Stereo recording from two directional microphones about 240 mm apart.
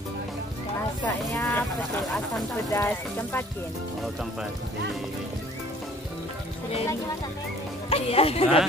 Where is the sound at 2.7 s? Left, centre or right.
Centre.